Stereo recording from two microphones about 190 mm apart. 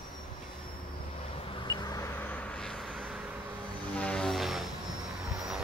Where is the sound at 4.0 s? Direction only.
5° left (ahead or behind).